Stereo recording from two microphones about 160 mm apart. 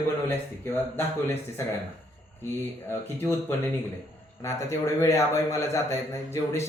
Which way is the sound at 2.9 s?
15° left (ahead or behind).